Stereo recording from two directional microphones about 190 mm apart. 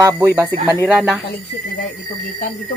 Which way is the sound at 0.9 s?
5° right (ahead or behind).